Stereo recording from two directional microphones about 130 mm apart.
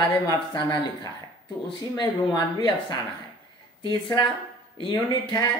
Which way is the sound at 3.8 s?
35° left (ahead or behind).